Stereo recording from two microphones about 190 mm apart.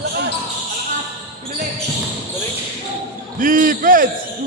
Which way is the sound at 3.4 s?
45° right (ahead or behind).